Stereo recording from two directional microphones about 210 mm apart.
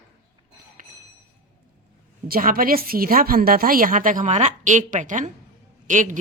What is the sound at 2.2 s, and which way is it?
A woman's voice, 45° right (ahead or behind).